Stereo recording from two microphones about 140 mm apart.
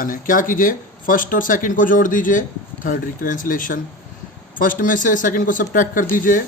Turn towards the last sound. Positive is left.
turn(degrees=75)  # may be behind; listen again after turning